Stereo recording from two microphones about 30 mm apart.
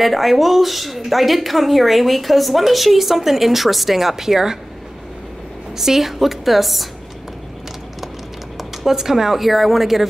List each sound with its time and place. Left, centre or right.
0.0 s speech: centre
5.8 s speech: centre
8.8 s speech: centre